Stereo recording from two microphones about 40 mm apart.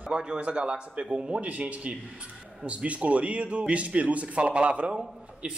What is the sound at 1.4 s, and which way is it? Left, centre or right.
Speech, right.